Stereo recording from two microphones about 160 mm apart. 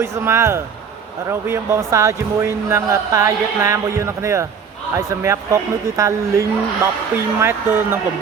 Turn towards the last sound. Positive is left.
turn(degrees=-15)  # may be behind; listen again after turning